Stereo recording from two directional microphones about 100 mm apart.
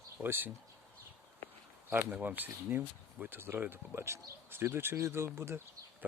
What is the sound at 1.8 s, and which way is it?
Speech, 20° right (ahead or behind).